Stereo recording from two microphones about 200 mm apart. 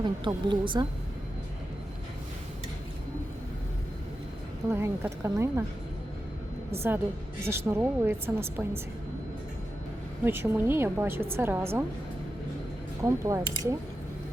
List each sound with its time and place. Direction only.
0.0 s speech: 25° right (ahead or behind)
4.7 s a woman's voice: 15° right (ahead or behind)
6.7 s a woman's voice: 10° right (ahead or behind)
10.2 s a woman's voice: 10° right (ahead or behind)
13.0 s a woman's voice: 15° right (ahead or behind)